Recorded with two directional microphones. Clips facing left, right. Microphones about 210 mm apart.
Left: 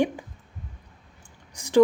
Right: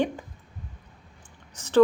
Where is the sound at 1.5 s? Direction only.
10° left (ahead or behind).